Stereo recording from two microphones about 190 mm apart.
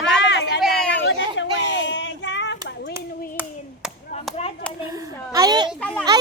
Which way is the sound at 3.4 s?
10° right (ahead or behind).